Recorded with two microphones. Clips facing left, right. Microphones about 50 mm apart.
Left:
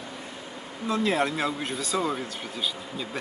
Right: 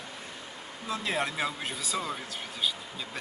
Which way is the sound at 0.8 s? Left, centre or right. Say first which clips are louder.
Left 6 dB; centre.